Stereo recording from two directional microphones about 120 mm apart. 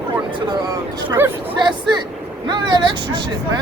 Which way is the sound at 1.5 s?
35° right (ahead or behind).